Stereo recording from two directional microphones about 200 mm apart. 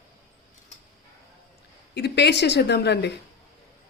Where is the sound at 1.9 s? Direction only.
55° left (ahead or behind).